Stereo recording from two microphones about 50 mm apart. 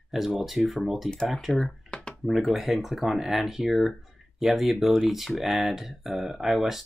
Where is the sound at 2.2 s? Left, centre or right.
Centre.